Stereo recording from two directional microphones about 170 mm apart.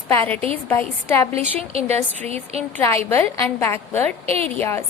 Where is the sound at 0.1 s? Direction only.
15° left (ahead or behind).